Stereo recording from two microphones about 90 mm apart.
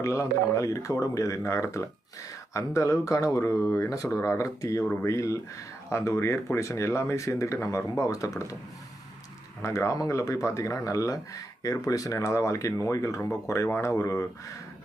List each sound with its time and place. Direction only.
0.0 s speech: 35° left (ahead or behind)
9.6 s speech: 35° left (ahead or behind)